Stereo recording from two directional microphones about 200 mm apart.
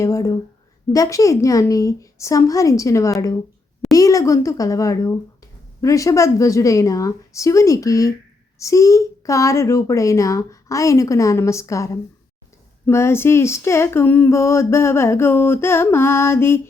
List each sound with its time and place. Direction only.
0.0 s speech: 15° left (ahead or behind)